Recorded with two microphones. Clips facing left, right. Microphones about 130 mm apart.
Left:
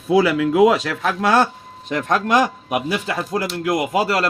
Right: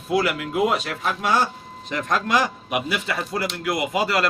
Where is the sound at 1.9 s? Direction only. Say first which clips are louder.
Left 4 dB; 45° left (ahead or behind).